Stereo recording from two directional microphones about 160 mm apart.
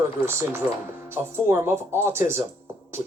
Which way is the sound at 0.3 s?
15° right (ahead or behind).